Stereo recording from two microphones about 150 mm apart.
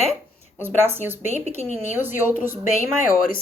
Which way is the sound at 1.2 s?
50° left (ahead or behind).